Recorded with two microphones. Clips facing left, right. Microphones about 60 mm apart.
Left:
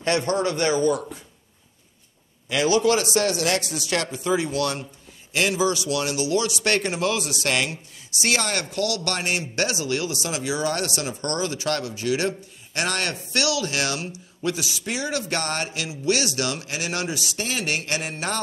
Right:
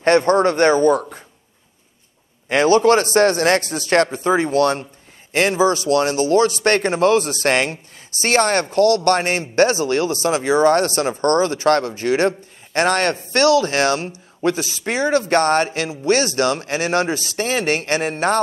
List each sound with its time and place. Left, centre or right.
0.0 s a man's voice: right
2.5 s a man's voice: right